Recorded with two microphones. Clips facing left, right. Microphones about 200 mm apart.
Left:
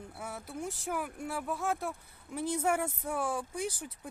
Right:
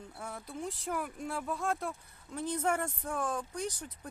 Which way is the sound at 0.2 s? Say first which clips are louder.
Left 1 dB; 5° left (ahead or behind).